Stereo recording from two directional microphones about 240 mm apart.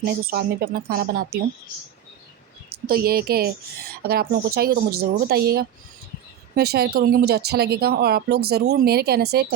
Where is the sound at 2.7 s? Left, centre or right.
Right.